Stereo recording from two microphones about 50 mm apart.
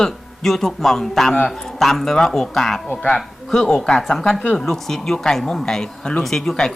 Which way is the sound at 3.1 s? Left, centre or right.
Centre.